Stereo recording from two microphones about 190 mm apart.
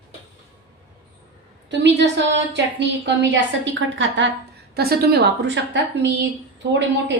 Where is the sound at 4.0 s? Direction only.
70° right (ahead or behind).